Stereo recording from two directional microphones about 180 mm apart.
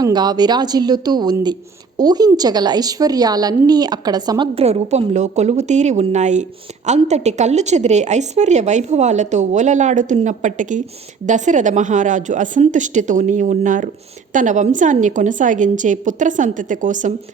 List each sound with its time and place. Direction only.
0.0 s a woman's voice: 25° right (ahead or behind); by 17.2 s 45° right (ahead or behind)